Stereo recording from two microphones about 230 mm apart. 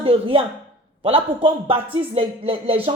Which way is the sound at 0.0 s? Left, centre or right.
Right.